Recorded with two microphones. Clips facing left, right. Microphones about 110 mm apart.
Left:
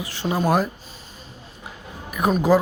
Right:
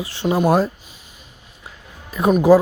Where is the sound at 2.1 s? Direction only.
25° right (ahead or behind).